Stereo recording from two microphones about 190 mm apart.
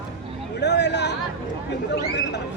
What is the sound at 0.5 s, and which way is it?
Speech, 65° left (ahead or behind).